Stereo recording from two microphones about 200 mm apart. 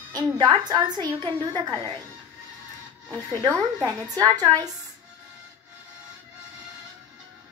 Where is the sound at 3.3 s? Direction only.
15° right (ahead or behind).